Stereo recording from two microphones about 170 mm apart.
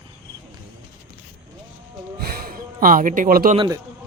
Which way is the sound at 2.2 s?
65° right (ahead or behind).